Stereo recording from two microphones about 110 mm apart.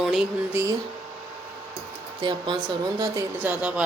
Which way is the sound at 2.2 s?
45° right (ahead or behind).